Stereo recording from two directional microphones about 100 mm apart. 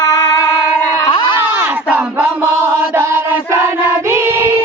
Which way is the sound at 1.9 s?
25° right (ahead or behind).